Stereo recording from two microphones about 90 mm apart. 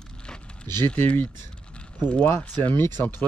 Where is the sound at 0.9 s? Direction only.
20° left (ahead or behind).